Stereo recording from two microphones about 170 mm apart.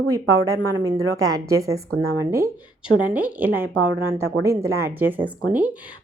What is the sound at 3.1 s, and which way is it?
Speech, 10° right (ahead or behind).